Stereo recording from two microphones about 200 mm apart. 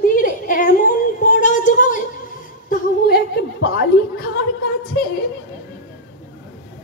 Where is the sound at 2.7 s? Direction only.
50° left (ahead or behind).